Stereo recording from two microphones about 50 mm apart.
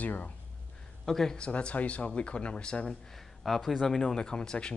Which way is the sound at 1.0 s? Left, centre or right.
Centre.